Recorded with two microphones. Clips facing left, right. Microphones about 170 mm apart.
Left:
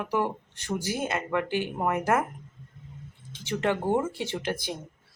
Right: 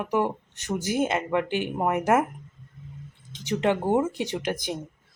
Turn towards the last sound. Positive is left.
turn(degrees=-15)  # may be behind; listen again after turning